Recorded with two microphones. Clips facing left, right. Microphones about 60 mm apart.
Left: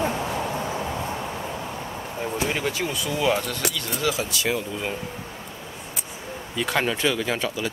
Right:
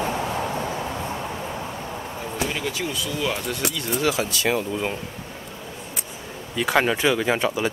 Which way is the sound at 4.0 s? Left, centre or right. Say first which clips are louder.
Right 3 dB; right.